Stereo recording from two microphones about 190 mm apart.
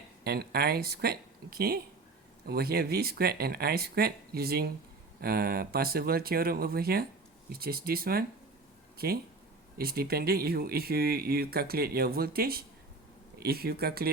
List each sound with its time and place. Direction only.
0.3 s speech: 55° right (ahead or behind)